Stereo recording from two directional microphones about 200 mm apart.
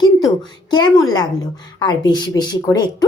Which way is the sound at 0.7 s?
20° left (ahead or behind).